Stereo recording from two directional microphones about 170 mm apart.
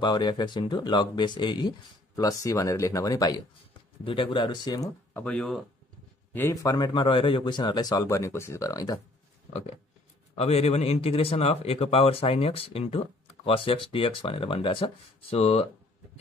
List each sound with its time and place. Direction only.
0.0 s speech: 25° left (ahead or behind)
4.0 s speech: 30° left (ahead or behind)
5.1 s speech: 10° left (ahead or behind)
6.3 s speech: 15° left (ahead or behind)
10.3 s speech: 35° left (ahead or behind)